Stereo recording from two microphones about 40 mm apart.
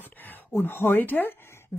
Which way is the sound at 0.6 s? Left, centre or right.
Left.